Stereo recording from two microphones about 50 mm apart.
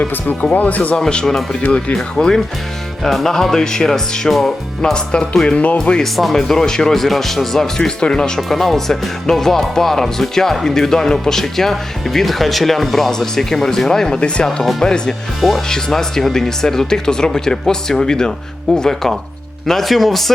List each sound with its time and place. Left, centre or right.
0.5 s speech: left
0.9 s speech: centre
4.8 s speech: centre
6.0 s speech: centre
14.4 s speech: centre
15.4 s speech: centre